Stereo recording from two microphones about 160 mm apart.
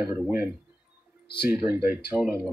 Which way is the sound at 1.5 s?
15° right (ahead or behind).